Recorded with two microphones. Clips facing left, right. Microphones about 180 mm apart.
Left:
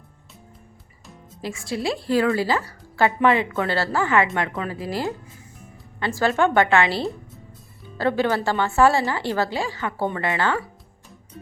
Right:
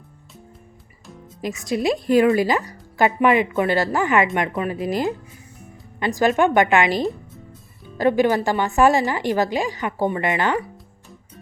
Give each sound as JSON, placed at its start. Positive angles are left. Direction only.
{"t": 1.4, "sound": "speech", "side_deg": -20}